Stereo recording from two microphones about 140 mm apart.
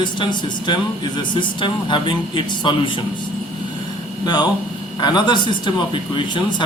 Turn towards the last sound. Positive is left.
turn(degrees=35)  # may be behind; listen again after turning